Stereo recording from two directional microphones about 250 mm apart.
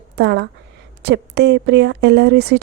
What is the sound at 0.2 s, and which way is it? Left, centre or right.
A woman's voice, right.